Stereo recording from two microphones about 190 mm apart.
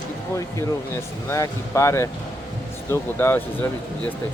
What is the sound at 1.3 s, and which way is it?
Speech, 15° left (ahead or behind).